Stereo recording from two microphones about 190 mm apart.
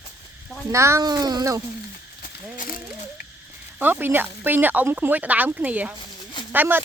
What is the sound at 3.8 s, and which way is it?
Speech, 10° right (ahead or behind).